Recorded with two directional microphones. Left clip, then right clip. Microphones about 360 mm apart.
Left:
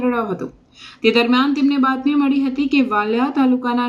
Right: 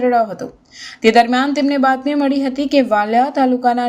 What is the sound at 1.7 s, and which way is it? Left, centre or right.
Speech, right.